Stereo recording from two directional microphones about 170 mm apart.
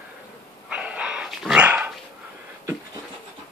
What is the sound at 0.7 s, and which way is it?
Dog, 5° right (ahead or behind).